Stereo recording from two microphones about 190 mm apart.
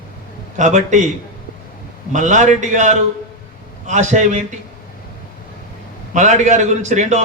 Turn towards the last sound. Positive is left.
turn(degrees=-40)  # may be behind; listen again after turning